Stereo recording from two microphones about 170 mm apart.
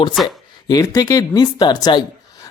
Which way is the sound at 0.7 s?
20° left (ahead or behind).